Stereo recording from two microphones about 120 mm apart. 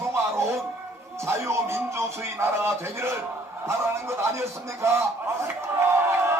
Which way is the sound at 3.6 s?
20° right (ahead or behind).